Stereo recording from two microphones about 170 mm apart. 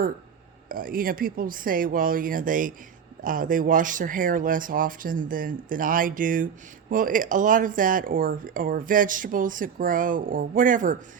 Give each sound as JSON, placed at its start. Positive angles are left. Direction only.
{"t": 0.7, "sound": "speech", "side_deg": -55}